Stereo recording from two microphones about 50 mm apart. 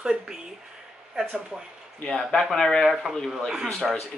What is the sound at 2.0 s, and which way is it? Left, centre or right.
A man's voice, centre.